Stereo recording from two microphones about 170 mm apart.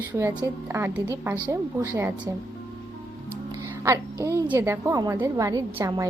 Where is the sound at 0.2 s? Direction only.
15° right (ahead or behind).